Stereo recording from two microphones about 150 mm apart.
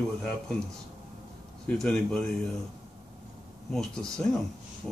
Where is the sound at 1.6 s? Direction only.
5° left (ahead or behind).